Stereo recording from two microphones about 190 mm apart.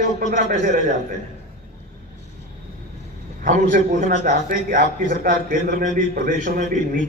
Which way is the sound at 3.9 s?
40° right (ahead or behind).